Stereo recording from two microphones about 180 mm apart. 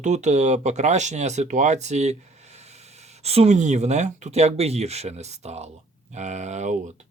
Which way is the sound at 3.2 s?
35° right (ahead or behind).